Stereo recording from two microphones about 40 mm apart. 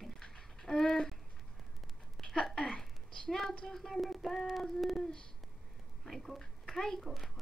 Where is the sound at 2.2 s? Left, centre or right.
Centre.